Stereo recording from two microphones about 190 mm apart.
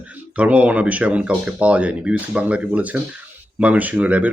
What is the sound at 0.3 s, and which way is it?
Speech, 5° right (ahead or behind).